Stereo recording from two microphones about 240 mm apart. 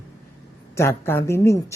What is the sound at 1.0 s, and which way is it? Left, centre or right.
Speech, centre.